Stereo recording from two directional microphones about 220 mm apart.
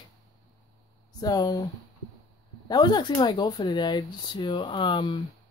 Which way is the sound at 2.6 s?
20° left (ahead or behind).